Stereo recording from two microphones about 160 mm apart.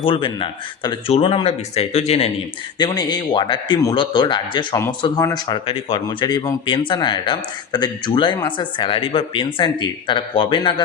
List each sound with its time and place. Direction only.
0.0 s a man's voice: 30° left (ahead or behind)
2.7 s speech: 25° left (ahead or behind)